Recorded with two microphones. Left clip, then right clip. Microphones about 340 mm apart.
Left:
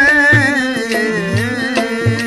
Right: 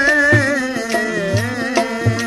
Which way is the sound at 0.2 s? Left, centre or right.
Left.